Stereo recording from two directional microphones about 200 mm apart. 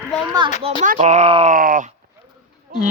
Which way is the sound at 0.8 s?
35° right (ahead or behind).